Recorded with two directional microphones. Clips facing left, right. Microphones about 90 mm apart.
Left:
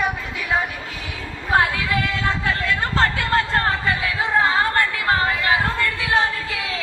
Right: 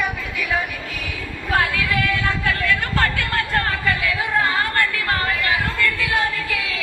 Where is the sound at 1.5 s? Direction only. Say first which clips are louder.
Left 1 dB; 25° left (ahead or behind).